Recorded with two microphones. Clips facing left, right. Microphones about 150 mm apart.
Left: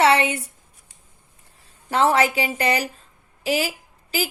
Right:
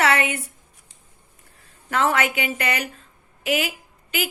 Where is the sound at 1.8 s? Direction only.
30° left (ahead or behind).